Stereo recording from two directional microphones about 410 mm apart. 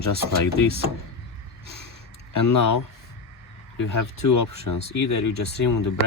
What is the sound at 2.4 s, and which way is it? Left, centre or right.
Speech, left.